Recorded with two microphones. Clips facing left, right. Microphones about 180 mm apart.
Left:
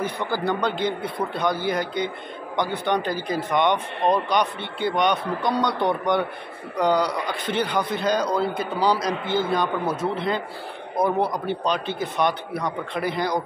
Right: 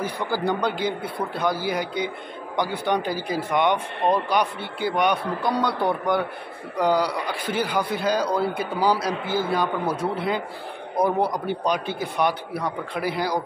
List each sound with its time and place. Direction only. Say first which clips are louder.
0.0 s speech: even; 10° right (ahead or behind)